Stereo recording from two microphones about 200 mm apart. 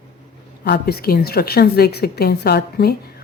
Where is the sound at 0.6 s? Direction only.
50° left (ahead or behind).